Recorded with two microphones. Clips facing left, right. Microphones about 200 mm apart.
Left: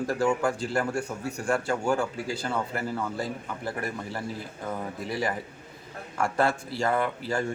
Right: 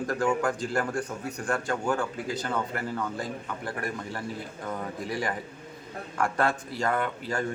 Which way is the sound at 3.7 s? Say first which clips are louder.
Left 2 dB; 25° left (ahead or behind).